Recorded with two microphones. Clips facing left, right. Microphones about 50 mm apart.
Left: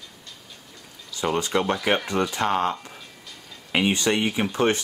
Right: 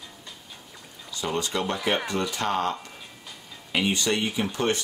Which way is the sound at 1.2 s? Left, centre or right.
Left.